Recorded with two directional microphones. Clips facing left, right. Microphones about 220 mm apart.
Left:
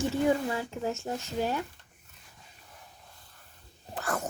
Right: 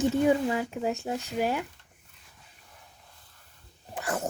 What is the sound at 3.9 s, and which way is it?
Speech, 15° right (ahead or behind).